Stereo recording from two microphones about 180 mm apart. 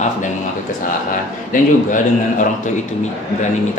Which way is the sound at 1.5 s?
45° left (ahead or behind).